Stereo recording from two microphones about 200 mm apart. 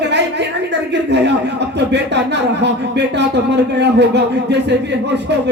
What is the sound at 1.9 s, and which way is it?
Speech, 60° right (ahead or behind).